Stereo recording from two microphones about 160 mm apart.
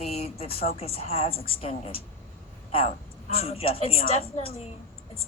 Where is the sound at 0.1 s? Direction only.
40° left (ahead or behind).